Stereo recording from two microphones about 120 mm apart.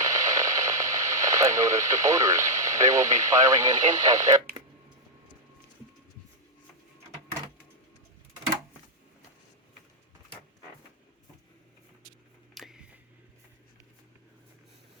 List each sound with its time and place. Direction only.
0.0 s radio: 30° right (ahead or behind)
3.9 s speech: 30° right (ahead or behind)
12.5 s a sound: 5° right (ahead or behind)